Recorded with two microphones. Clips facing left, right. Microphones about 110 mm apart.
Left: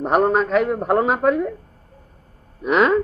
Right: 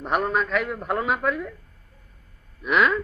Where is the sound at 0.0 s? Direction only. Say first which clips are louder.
Left 7 dB; 35° left (ahead or behind).